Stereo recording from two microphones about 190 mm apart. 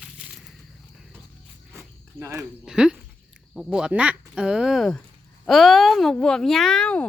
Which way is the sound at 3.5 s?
5° right (ahead or behind).